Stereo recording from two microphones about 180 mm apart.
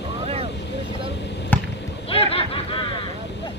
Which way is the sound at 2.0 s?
30° left (ahead or behind).